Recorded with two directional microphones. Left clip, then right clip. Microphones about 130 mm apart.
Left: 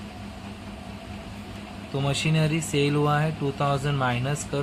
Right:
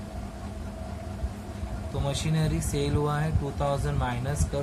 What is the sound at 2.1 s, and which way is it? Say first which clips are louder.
Speech: left 5 dB; 80° left.